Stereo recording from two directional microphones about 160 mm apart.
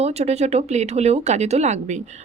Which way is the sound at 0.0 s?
40° right (ahead or behind).